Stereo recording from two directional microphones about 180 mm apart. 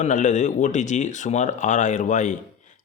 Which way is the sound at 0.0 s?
45° left (ahead or behind).